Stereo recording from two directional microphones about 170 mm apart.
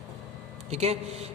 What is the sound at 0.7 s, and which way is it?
Speech, 40° right (ahead or behind).